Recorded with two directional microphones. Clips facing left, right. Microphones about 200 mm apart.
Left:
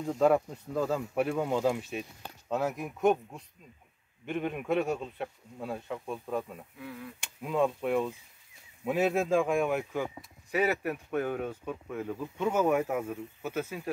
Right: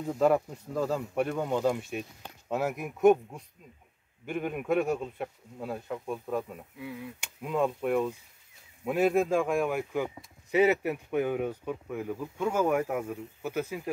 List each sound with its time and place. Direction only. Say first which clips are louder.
0.0 s speech: even; 5° right (ahead or behind)
10.5 s speech: right 5 dB; 20° right (ahead or behind); by 13.2 s centre (ahead or behind)
13.4 s speech: right 3 dB; 10° right (ahead or behind)